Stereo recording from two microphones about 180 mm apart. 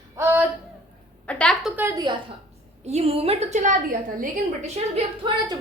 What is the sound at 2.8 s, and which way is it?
A woman's voice, 35° right (ahead or behind).